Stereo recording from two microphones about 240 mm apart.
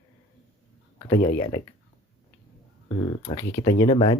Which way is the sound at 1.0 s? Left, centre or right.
Centre.